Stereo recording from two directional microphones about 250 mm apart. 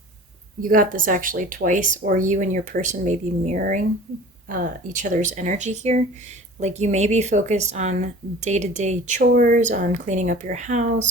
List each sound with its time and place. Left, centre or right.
0.6 s speech: right